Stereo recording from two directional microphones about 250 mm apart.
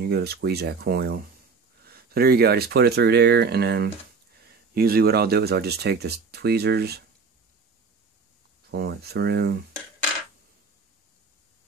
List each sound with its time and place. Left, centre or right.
0.0 s speech: right
8.6 s speech: right